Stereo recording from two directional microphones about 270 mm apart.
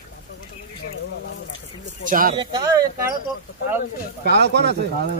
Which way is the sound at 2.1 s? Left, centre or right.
Right.